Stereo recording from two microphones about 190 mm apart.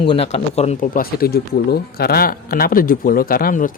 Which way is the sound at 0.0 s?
30° left (ahead or behind).